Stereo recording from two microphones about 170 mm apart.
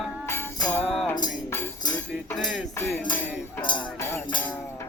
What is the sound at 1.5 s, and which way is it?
Music, 20° left (ahead or behind).